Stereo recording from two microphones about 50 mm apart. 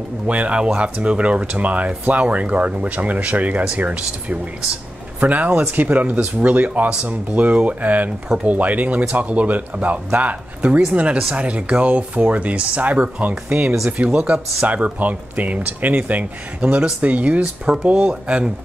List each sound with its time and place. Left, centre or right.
0.3 s speech: right